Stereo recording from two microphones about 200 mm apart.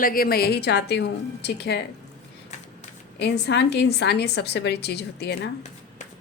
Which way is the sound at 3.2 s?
55° left (ahead or behind).